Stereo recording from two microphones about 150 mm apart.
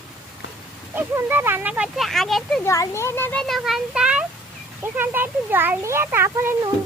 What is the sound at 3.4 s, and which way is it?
A child's voice, centre (ahead or behind).